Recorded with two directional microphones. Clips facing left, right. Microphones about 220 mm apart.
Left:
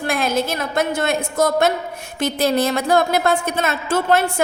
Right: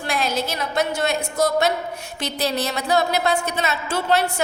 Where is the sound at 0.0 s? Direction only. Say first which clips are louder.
Left 4 dB; 50° left (ahead or behind).